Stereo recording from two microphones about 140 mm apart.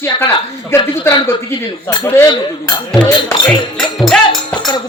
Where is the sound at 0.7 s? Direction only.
20° left (ahead or behind).